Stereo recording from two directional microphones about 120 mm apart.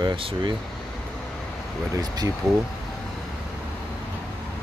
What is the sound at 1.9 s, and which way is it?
Speech, 30° right (ahead or behind).